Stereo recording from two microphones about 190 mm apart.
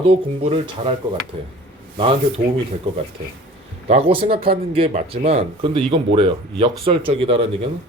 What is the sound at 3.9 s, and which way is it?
Speech, 30° right (ahead or behind).